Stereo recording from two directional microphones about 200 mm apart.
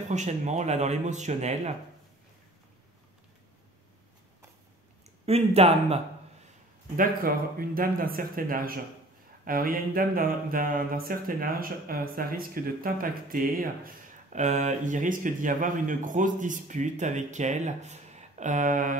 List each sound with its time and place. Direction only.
0.1 s speech: 35° right (ahead or behind)
5.2 s speech: 30° right (ahead or behind)
7.0 s a sound: 45° right (ahead or behind)